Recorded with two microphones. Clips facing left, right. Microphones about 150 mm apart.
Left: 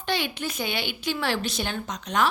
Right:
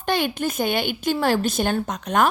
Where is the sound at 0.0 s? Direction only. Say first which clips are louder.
Right 6 dB; 50° right (ahead or behind).